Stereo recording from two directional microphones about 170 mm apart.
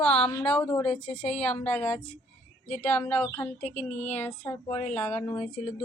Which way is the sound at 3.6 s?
40° left (ahead or behind).